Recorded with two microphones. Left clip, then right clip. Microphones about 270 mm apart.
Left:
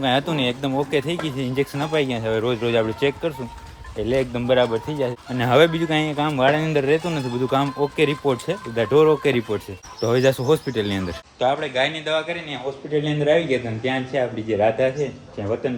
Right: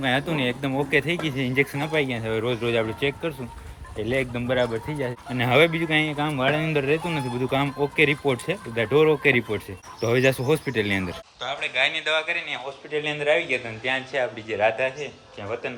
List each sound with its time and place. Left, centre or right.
0.0 s speech: centre
11.6 s a man's voice: centre
11.9 s a man's voice: right